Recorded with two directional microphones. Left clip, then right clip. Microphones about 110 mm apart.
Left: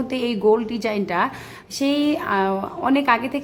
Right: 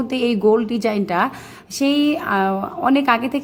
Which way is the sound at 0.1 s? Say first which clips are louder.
Right 2 dB; 25° right (ahead or behind).